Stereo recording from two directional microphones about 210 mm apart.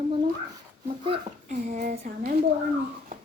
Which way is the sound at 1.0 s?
25° right (ahead or behind).